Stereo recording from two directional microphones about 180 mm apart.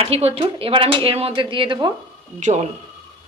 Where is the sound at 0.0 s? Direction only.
35° right (ahead or behind).